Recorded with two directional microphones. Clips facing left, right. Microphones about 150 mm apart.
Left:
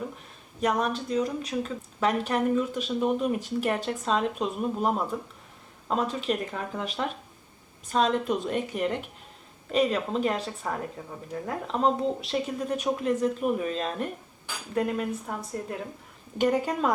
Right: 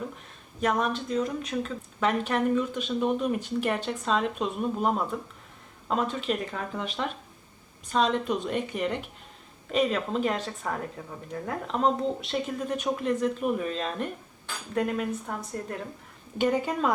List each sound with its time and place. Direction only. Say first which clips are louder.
0.6 s a woman's voice: even; centre (ahead or behind)